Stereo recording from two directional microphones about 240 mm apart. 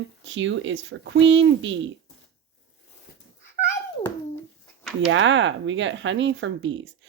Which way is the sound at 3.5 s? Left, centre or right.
Left.